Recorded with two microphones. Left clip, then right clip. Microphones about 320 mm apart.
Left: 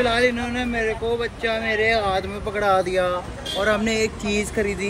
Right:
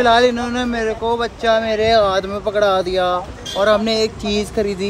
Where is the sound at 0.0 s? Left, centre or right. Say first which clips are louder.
Right 7 dB; centre.